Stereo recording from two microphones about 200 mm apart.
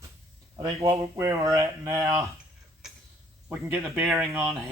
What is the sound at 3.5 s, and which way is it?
Speech, 5° right (ahead or behind).